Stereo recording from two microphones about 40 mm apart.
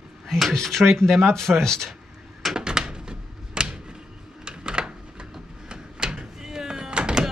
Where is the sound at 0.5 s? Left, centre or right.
Centre.